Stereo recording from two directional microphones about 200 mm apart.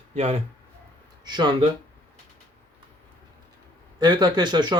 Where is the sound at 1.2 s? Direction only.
20° right (ahead or behind).